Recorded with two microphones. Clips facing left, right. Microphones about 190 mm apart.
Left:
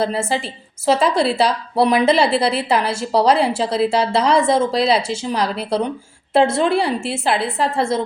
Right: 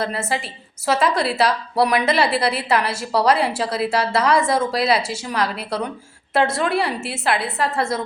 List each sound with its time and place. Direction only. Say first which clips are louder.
0.0 s a woman's voice: left 4 dB; 30° left (ahead or behind)